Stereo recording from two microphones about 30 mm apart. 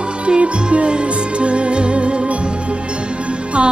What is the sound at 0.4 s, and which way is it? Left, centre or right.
Music, right.